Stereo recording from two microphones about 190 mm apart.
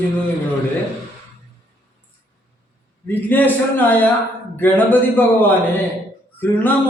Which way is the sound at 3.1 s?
10° left (ahead or behind).